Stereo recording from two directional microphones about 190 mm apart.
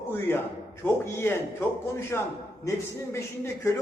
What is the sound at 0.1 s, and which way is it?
A man's voice, 10° left (ahead or behind).